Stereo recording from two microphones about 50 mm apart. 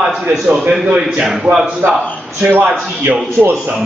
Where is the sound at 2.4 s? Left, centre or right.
Right.